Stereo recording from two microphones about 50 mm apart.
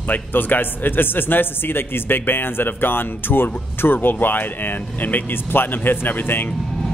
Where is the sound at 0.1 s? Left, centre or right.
Left.